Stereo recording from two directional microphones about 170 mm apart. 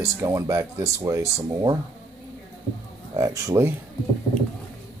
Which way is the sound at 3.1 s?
20° right (ahead or behind).